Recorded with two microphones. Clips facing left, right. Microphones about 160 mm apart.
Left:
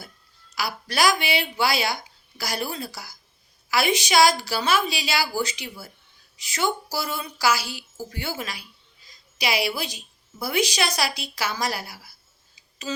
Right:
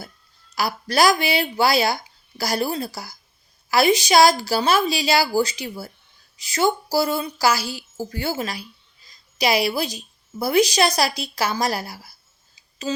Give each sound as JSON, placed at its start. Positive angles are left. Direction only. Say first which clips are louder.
{"t": 0.5, "sound": "a woman's voice", "louder": "right 5 dB", "side_deg": -40}